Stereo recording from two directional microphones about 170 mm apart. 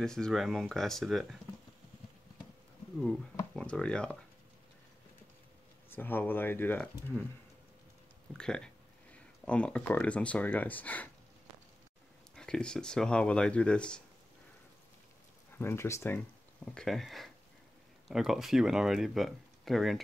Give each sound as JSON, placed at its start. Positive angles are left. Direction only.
{"t": 0.0, "sound": "speech", "side_deg": 5}
{"t": 3.5, "sound": "speech", "side_deg": 5}
{"t": 5.9, "sound": "speech", "side_deg": 10}
{"t": 8.3, "sound": "speech", "side_deg": 5}
{"t": 12.4, "sound": "speech", "side_deg": 5}
{"t": 15.5, "sound": "speech", "side_deg": 15}
{"t": 16.7, "sound": "speech", "side_deg": 0}